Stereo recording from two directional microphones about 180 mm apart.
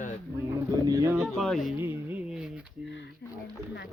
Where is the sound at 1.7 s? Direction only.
10° right (ahead or behind).